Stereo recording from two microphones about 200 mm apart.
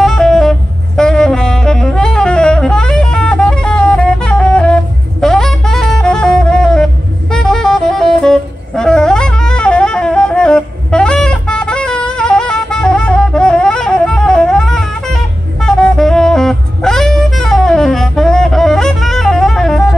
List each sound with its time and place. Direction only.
0.0 s saxophone: centre (ahead or behind)